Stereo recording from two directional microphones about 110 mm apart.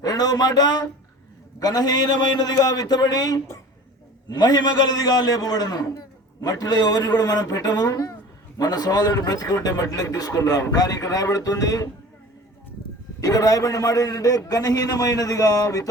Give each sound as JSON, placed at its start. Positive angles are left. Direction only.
{"t": 0.0, "sound": "a man's voice", "side_deg": 35}
{"t": 13.1, "sound": "a man's voice", "side_deg": 30}